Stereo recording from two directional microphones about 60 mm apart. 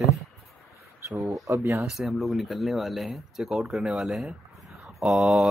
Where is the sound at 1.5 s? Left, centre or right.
Right.